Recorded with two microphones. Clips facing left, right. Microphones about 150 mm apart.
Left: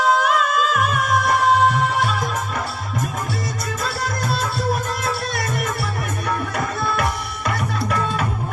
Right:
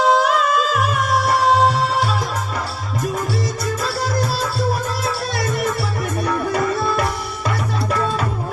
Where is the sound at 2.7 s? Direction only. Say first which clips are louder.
Right 3 dB; 35° right (ahead or behind).